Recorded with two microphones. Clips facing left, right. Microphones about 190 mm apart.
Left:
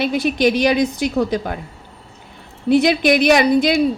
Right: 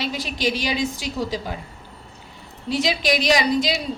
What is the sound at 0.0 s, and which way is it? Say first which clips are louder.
A woman's voice: left 9 dB; 55° left (ahead or behind).